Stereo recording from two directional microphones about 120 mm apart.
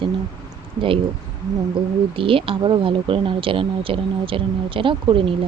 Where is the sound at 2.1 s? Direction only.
50° right (ahead or behind).